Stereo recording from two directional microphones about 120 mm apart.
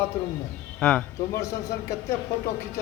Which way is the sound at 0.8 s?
10° left (ahead or behind).